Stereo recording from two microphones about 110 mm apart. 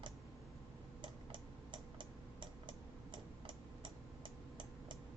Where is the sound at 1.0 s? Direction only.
45° right (ahead or behind).